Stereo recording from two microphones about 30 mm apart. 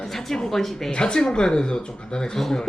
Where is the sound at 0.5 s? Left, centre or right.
Centre.